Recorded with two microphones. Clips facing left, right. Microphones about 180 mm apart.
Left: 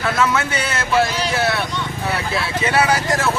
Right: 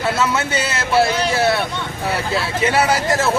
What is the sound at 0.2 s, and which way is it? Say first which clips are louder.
Speech: even; 25° right (ahead or behind).